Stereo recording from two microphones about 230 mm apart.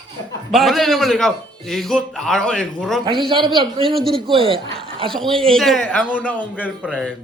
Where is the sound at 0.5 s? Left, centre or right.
Centre.